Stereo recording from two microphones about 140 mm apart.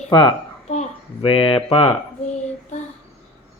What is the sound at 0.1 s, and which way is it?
Speech, 35° left (ahead or behind).